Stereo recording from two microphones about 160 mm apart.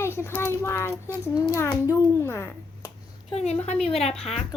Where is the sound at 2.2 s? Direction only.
15° left (ahead or behind).